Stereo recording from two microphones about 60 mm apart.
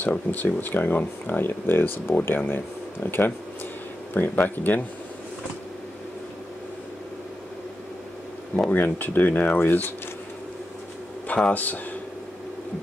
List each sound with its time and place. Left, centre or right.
0.0 s speech: left
8.6 s speech: left
11.2 s a sound: centre
11.5 s speech: left